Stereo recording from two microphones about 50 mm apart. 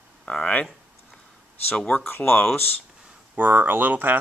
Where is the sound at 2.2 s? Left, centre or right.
Left.